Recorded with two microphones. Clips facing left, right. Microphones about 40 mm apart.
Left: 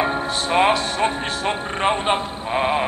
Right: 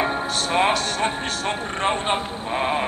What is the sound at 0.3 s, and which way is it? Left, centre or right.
Music, left.